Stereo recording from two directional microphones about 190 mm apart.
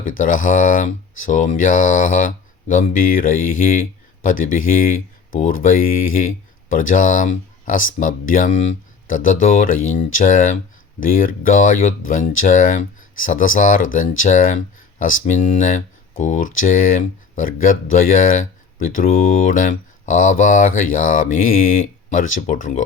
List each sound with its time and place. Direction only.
0.0 s speech: 45° left (ahead or behind)